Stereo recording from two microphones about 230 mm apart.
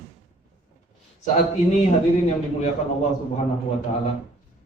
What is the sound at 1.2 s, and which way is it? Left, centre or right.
Speech, left.